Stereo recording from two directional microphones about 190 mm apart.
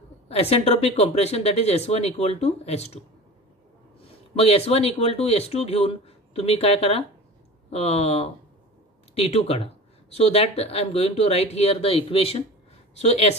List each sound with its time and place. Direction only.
0.3 s speech: 35° left (ahead or behind)
4.4 s speech: 30° left (ahead or behind)